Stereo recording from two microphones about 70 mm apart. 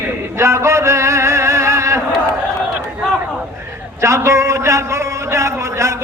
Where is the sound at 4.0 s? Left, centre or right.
Right.